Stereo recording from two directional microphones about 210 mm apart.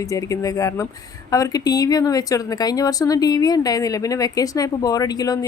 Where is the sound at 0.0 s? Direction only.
15° left (ahead or behind).